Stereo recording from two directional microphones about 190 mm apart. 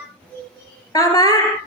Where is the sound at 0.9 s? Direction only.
15° left (ahead or behind).